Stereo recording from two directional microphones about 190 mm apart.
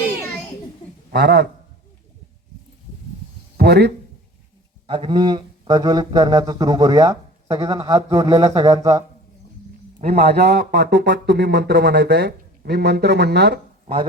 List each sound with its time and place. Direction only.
1.1 s speech: 50° right (ahead or behind)
3.6 s speech: 60° right (ahead or behind)
4.9 s speech: 25° right (ahead or behind)
10.0 s a man's voice: 35° right (ahead or behind)
10.2 s speech: 55° right (ahead or behind)
13.8 s speech: 30° right (ahead or behind)